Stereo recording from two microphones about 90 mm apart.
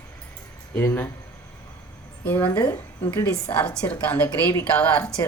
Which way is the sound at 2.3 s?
20° left (ahead or behind).